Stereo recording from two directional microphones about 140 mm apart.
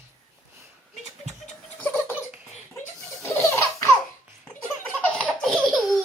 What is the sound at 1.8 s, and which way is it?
Laughter, 10° left (ahead or behind).